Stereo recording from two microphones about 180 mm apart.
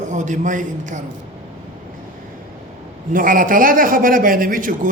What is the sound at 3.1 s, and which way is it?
Speech, 50° right (ahead or behind).